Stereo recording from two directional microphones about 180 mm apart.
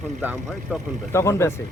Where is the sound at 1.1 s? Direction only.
15° left (ahead or behind).